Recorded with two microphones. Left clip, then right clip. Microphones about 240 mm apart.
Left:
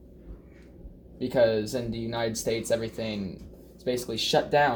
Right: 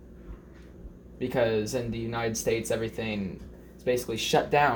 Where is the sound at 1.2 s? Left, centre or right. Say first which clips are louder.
Left 3 dB; centre.